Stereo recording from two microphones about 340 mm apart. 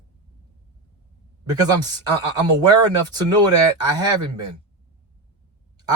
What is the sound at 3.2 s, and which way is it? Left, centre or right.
Speech, centre.